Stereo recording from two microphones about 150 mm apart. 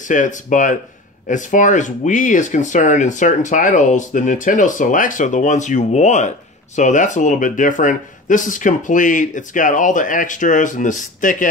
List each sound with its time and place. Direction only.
0.1 s speech: 55° left (ahead or behind)